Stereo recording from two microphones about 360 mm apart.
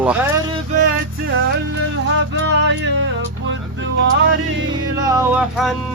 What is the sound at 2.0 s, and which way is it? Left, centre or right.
Music, right.